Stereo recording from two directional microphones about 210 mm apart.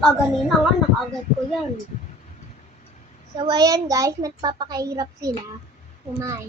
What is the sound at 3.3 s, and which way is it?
A child's voice, 20° right (ahead or behind).